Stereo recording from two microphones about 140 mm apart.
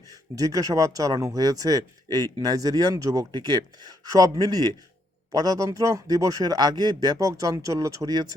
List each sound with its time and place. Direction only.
0.3 s speech: 25° right (ahead or behind)